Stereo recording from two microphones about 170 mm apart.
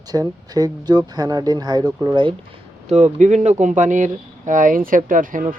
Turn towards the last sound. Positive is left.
turn(degrees=-50)  # may be behind; listen again after turning